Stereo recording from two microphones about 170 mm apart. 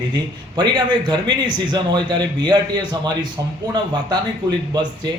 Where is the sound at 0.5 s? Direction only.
25° right (ahead or behind).